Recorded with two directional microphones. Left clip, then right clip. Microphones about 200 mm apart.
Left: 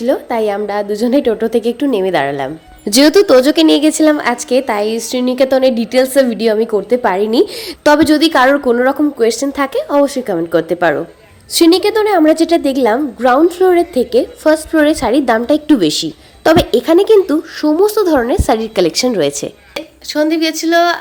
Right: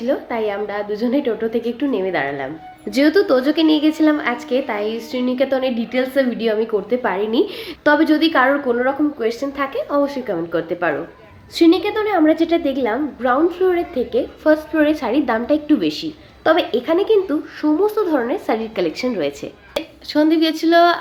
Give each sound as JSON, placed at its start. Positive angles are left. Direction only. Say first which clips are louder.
{"t": 0.0, "sound": "a woman's voice", "louder": "left 6 dB", "side_deg": 50}
{"t": 19.7, "sound": "speech", "louder": "left 1 dB", "side_deg": 0}